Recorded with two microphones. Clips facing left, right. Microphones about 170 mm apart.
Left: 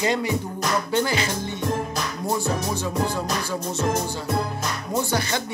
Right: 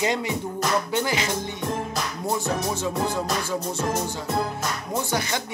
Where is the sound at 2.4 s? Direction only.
25° right (ahead or behind).